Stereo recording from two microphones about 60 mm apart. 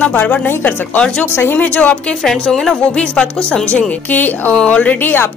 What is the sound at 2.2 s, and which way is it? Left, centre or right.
Speech, centre.